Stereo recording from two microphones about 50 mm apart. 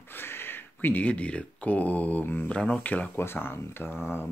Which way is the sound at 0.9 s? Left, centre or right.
Left.